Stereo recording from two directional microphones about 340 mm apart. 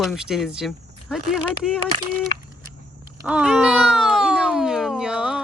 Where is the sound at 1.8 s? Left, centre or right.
Right.